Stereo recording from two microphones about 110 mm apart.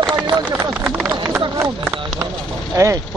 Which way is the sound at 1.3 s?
25° right (ahead or behind).